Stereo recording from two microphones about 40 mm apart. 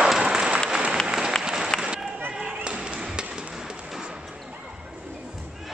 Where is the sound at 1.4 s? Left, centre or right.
Centre.